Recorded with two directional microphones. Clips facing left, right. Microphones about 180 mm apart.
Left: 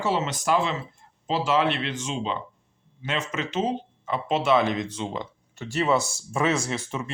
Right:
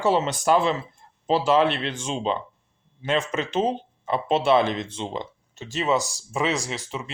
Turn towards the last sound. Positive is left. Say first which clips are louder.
# left 2 dB
turn(degrees=-15)  # may be behind; listen again after turning